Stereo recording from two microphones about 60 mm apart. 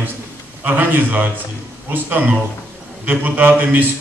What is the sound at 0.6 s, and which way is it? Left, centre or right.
A man's voice, right.